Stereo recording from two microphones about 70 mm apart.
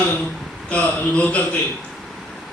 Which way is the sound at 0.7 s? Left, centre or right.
Centre.